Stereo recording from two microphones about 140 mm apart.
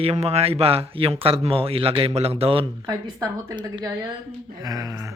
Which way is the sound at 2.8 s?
25° right (ahead or behind).